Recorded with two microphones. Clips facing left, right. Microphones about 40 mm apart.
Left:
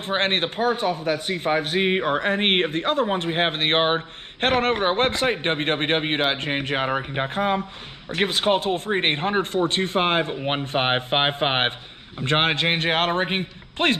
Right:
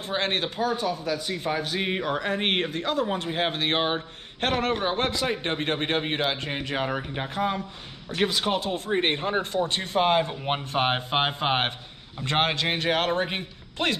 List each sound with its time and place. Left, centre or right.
0.0 s speech: left